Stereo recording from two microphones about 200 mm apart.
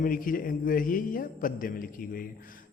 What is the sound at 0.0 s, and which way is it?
A man's voice, 45° left (ahead or behind).